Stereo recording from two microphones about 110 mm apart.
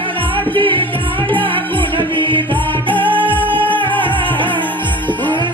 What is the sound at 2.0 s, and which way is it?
Music, 45° right (ahead or behind).